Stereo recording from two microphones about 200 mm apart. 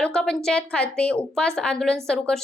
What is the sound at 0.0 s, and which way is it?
A woman's voice, 5° left (ahead or behind).